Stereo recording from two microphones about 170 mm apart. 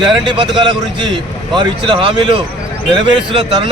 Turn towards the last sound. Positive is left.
turn(degrees=-30)  # may be behind; listen again after turning